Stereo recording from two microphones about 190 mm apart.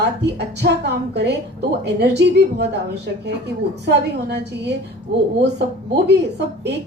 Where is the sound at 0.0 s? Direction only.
60° right (ahead or behind).